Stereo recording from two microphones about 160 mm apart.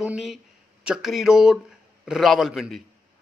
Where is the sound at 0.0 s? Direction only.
5° right (ahead or behind).